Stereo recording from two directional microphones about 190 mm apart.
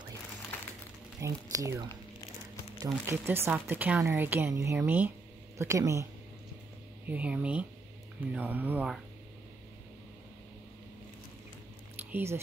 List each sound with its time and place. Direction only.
1.2 s speech: 15° right (ahead or behind)
7.1 s speech: 5° right (ahead or behind)
12.1 s speech: 10° right (ahead or behind)